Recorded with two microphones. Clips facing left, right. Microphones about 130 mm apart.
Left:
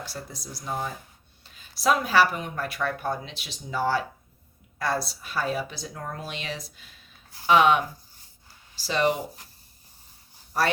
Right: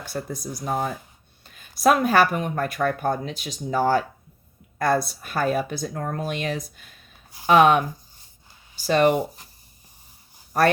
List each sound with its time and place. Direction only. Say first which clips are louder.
0.0 s speech: right 7 dB; 55° right (ahead or behind)
10.5 s speech: right 6 dB; 55° right (ahead or behind)